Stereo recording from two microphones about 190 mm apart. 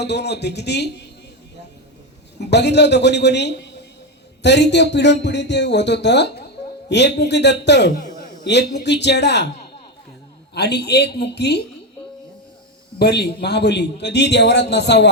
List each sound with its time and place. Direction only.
0.0 s a man's voice: 60° left (ahead or behind)
2.4 s a man's voice: 65° left (ahead or behind)
10.5 s a man's voice: 60° left (ahead or behind)
13.0 s a man's voice: 60° left (ahead or behind)